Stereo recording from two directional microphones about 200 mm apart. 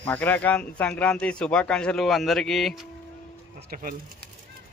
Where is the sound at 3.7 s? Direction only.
45° right (ahead or behind).